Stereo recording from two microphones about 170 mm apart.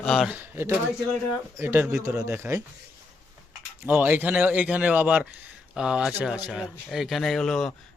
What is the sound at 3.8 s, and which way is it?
Speech, 10° right (ahead or behind).